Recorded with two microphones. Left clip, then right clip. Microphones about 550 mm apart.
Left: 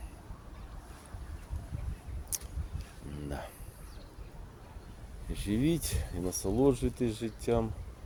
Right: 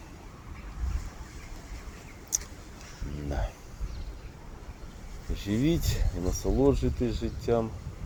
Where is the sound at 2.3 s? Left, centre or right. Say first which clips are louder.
Right 9 dB; left.